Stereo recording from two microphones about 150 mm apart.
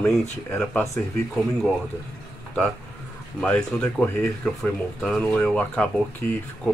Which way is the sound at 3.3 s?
10° left (ahead or behind).